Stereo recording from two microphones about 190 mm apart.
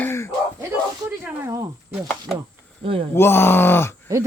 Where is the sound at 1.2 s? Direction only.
15° right (ahead or behind).